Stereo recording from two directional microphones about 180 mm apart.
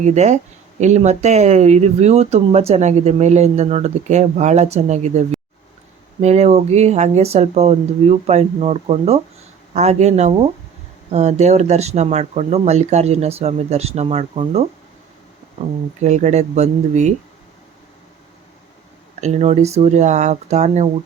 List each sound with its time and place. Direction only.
0.0 s speech: 40° right (ahead or behind)
6.2 s speech: 40° right (ahead or behind)
16.0 s speech: 40° right (ahead or behind)
19.2 s speech: 40° right (ahead or behind)